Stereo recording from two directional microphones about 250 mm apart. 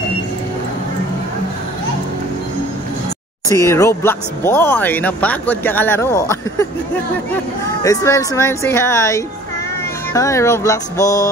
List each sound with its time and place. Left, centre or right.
3.6 s speech: centre
7.8 s speech: centre